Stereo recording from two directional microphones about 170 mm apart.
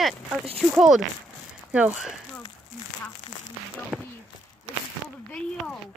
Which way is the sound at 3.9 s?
10° right (ahead or behind).